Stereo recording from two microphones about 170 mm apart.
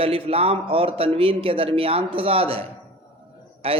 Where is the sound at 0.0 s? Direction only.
35° right (ahead or behind).